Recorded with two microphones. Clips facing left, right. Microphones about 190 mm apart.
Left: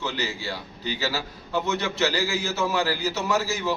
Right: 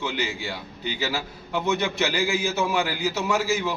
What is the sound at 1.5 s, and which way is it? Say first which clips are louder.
A man's voice: right 1 dB; 15° right (ahead or behind).